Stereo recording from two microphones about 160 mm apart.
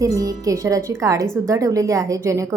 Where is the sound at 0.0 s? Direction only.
20° right (ahead or behind).